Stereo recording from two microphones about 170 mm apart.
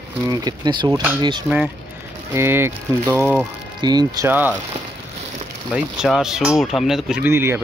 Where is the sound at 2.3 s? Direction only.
15° right (ahead or behind).